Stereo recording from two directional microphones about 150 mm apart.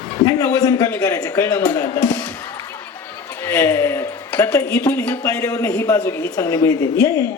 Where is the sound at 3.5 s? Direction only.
20° left (ahead or behind).